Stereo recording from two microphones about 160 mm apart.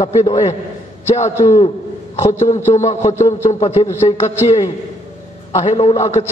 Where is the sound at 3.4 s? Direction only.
45° left (ahead or behind).